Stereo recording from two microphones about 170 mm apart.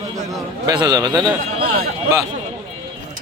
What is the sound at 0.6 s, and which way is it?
Speech, 20° right (ahead or behind).